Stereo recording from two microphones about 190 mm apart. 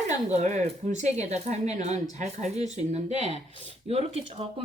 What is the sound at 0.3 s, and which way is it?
Speech, 35° right (ahead or behind).